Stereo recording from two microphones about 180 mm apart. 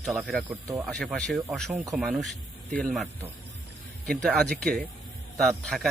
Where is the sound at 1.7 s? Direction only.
15° right (ahead or behind).